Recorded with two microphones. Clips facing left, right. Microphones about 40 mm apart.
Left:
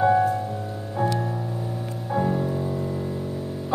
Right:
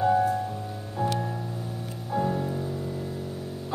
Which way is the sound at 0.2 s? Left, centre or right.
Centre.